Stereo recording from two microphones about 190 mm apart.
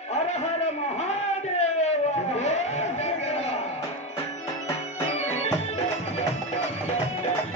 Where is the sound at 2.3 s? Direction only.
35° left (ahead or behind).